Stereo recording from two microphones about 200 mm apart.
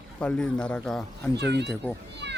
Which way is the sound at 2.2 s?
60° right (ahead or behind).